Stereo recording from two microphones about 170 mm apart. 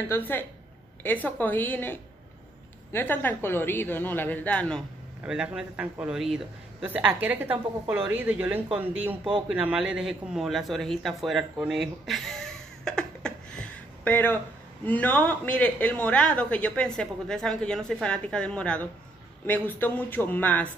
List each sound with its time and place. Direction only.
0.1 s a man's voice: 10° left (ahead or behind)
5.2 s a man's voice: 5° right (ahead or behind)
9.0 s a man's voice: 30° right (ahead or behind)
9.5 s a man's voice: 5° right (ahead or behind)
11.5 s a sound: 5° right (ahead or behind); by 14.4 s 10° left (ahead or behind)
14.9 s a man's voice: 10° left (ahead or behind)